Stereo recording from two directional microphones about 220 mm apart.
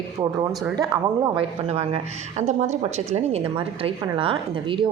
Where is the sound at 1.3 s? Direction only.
30° right (ahead or behind).